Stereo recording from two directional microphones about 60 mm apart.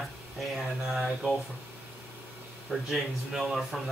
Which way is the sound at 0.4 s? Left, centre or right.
Centre.